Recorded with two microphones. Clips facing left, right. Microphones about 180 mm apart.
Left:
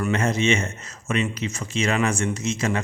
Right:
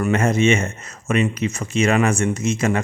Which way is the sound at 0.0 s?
50° right (ahead or behind).